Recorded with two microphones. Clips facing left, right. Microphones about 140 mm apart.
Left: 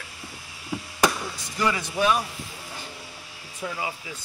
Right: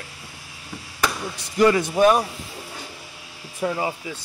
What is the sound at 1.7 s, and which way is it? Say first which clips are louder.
Speech: right 7 dB; 50° right (ahead or behind).